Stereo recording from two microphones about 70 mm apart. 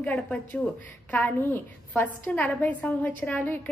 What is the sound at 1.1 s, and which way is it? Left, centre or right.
A woman's voice, left.